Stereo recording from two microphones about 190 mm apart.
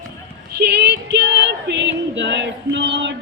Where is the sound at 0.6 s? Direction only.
60° right (ahead or behind).